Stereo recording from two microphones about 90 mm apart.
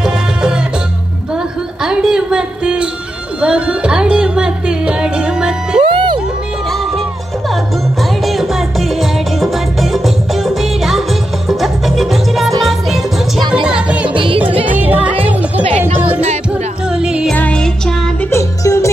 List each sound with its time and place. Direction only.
0.0 s music: 10° right (ahead or behind)
5.9 s music: 65° right (ahead or behind)
8.0 s music: centre (ahead or behind)
13.7 s music: 10° right (ahead or behind)
14.1 s music: 80° right
14.7 s music: 20° right (ahead or behind)
17.3 s music: 10° left (ahead or behind)
18.3 s music: 35° left (ahead or behind)